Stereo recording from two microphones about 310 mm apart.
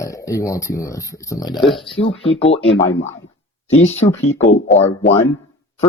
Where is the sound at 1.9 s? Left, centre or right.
Centre.